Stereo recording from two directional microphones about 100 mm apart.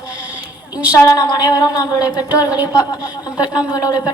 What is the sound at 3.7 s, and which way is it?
Speech, 40° left (ahead or behind).